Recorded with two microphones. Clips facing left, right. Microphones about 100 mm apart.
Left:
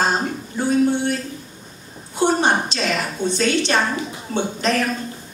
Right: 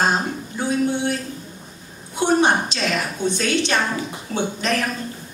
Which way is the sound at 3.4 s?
40° left (ahead or behind).